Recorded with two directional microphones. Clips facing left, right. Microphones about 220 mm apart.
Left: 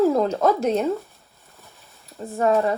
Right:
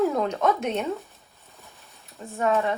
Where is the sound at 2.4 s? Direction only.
45° left (ahead or behind).